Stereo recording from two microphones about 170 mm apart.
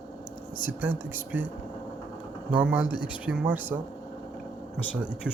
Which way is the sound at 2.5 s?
10° right (ahead or behind).